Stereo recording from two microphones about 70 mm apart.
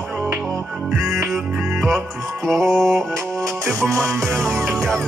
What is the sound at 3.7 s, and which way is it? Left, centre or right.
Music, right.